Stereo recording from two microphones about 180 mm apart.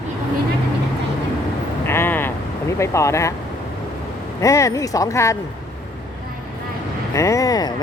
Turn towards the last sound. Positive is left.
turn(degrees=20)  # may be behind; listen again after turning